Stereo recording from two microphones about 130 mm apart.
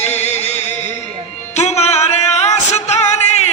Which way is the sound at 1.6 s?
55° left (ahead or behind).